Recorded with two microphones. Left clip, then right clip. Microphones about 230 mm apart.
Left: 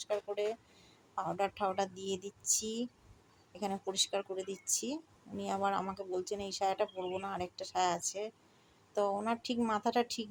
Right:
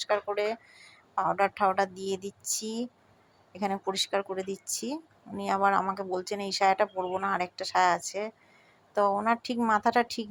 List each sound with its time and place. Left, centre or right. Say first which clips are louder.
0.1 s speech: right 7 dB; centre